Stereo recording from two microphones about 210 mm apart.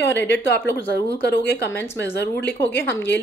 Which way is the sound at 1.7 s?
10° left (ahead or behind).